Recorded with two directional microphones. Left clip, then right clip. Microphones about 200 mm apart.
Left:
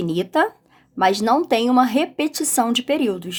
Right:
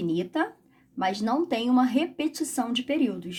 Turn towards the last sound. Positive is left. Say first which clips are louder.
# left 7 dB
turn(degrees=45)  # may be behind; listen again after turning